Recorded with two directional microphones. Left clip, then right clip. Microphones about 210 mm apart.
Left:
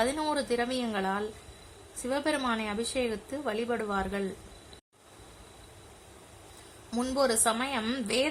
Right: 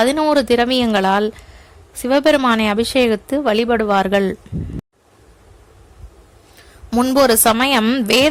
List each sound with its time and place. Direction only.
0.0 s a woman's voice: 35° right (ahead or behind)
6.9 s a woman's voice: 35° right (ahead or behind)